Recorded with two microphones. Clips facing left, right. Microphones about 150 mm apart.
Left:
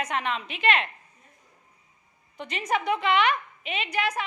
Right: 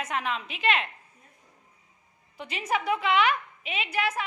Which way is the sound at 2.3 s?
5° right (ahead or behind).